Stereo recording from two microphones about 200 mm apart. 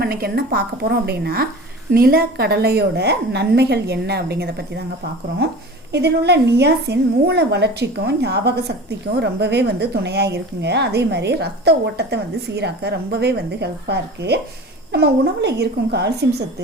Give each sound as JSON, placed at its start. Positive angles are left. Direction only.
{"t": 0.0, "sound": "a woman's voice", "side_deg": -50}
{"t": 5.9, "sound": "a woman's voice", "side_deg": -55}